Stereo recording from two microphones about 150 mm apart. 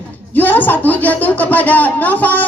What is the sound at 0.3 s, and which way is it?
Speech, 10° left (ahead or behind).